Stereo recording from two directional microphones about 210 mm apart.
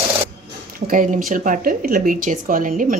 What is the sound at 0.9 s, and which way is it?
Speech, 40° right (ahead or behind).